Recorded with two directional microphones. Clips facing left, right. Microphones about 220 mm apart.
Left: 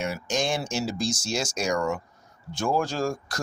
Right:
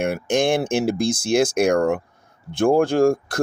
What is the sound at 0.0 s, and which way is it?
Speech, 55° right (ahead or behind).